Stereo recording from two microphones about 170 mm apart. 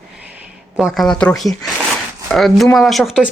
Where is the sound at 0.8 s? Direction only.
Centre (ahead or behind).